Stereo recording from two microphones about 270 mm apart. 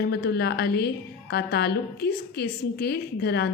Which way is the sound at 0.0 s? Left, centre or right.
Left.